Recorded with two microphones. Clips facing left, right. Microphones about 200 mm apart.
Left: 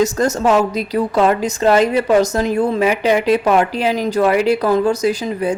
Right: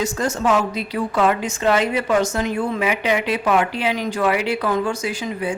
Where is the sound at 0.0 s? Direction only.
40° left (ahead or behind).